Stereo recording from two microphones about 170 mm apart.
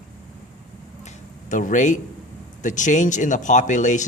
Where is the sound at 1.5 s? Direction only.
50° left (ahead or behind).